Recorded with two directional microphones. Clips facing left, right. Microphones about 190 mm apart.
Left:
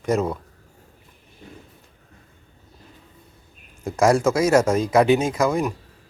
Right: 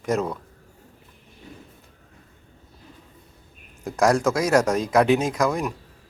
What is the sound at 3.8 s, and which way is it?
Speech, centre (ahead or behind).